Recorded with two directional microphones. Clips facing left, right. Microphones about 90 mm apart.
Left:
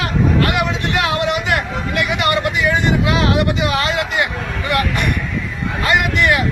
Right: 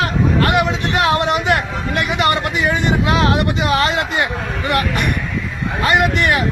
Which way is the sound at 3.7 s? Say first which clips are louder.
Right 2 dB; 35° right (ahead or behind).